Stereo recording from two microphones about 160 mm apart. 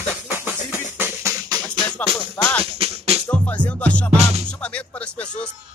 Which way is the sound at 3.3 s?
10° left (ahead or behind).